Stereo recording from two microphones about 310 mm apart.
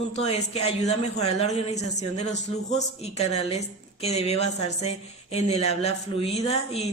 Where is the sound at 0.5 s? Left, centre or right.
Centre.